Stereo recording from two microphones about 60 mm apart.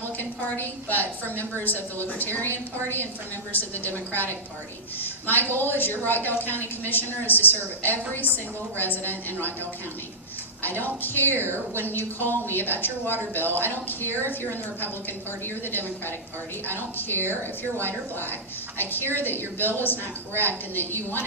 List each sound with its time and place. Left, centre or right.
0.2 s a woman's voice: left
10.6 s a woman's voice: left
16.6 s a woman's voice: left
18.8 s a woman's voice: left